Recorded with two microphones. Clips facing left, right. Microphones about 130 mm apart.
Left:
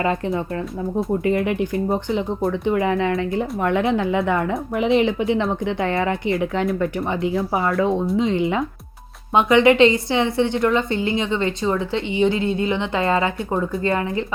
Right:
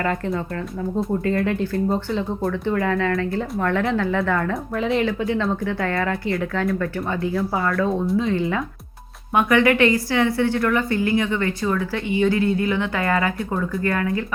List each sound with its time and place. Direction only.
0.0 s speech: 20° left (ahead or behind)